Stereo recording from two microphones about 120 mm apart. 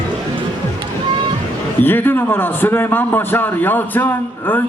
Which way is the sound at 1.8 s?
15° left (ahead or behind).